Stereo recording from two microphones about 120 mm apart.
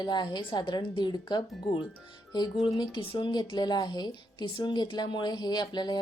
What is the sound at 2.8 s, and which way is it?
A woman's voice, 45° left (ahead or behind).